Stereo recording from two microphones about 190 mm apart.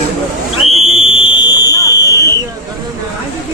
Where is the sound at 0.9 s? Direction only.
30° left (ahead or behind).